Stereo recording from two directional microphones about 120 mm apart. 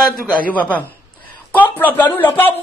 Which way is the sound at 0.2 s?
15° left (ahead or behind).